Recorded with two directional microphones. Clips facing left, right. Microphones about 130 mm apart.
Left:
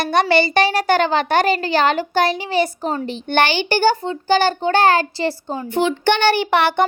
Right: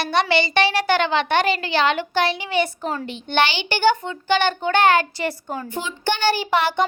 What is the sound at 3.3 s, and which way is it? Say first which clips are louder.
A child's voice: left 3 dB; 50° left (ahead or behind).